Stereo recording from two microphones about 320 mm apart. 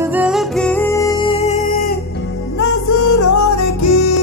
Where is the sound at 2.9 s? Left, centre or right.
Left.